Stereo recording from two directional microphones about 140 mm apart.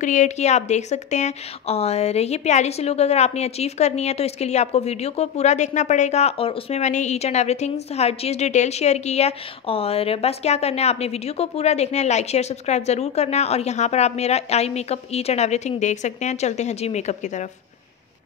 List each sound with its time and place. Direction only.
0.0 s a woman's voice: 60° left (ahead or behind); by 6.8 s 40° left (ahead or behind)
6.8 s a woman's voice: 55° left (ahead or behind)